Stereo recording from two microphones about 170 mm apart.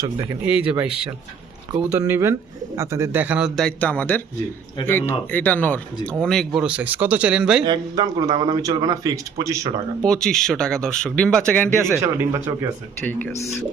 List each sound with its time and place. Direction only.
0.0 s a man's voice: 20° right (ahead or behind)
0.4 s speech: 5° right (ahead or behind)
2.0 s speech: 15° right (ahead or behind)
7.6 s a man's voice: 25° right (ahead or behind)
10.0 s speech: 5° left (ahead or behind)
11.8 s speech: 15° right (ahead or behind)
13.4 s speech: 15° left (ahead or behind)